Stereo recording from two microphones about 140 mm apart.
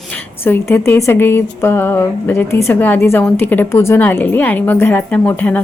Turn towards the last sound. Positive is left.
turn(degrees=10)  # may be behind; listen again after turning